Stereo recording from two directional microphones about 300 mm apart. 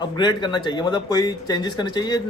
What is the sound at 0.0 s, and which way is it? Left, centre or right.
Speech, centre.